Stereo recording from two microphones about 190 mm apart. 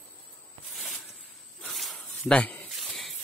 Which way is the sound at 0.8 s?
Centre (ahead or behind).